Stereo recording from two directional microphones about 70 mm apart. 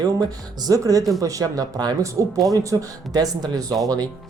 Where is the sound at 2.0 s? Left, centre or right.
Right.